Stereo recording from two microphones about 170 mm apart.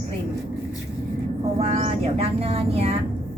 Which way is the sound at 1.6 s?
40° right (ahead or behind).